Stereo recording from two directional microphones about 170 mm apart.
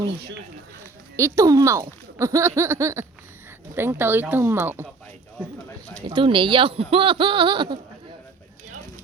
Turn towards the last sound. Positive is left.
turn(degrees=-25)  # may be behind; listen again after turning